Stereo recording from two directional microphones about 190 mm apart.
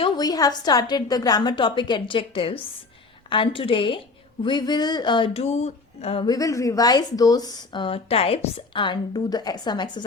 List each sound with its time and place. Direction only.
0.0 s speech: 20° left (ahead or behind)